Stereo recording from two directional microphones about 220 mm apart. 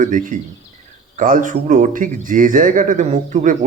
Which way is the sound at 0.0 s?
35° right (ahead or behind).